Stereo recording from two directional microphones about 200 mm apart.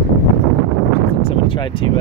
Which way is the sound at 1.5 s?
25° left (ahead or behind).